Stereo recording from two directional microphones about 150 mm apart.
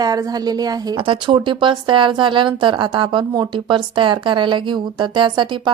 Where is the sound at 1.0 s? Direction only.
35° right (ahead or behind).